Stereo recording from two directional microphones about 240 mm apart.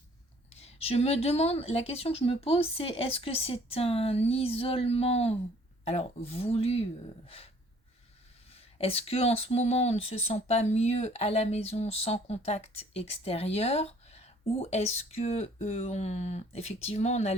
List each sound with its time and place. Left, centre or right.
0.5 s speech: left
8.5 s speech: left